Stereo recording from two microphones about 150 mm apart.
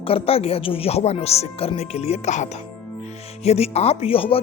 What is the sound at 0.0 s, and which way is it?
Speech, 40° left (ahead or behind).